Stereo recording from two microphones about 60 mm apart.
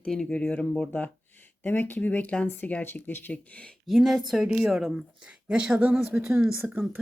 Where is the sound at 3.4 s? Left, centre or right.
Left.